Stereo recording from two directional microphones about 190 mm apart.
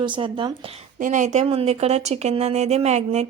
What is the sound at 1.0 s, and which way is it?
A woman's voice, 40° right (ahead or behind).